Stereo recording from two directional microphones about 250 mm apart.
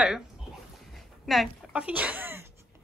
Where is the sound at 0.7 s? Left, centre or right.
Centre.